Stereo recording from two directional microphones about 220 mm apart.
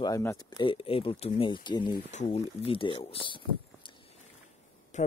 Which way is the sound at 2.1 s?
30° left (ahead or behind).